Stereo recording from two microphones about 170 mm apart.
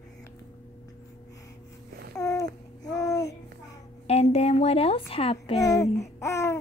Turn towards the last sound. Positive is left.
turn(degrees=15)  # may be behind; listen again after turning